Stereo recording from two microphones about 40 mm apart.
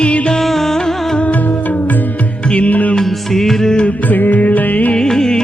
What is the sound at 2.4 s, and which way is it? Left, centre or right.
Music, left.